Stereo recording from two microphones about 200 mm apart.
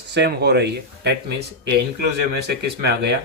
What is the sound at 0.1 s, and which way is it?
Speech, 55° right (ahead or behind).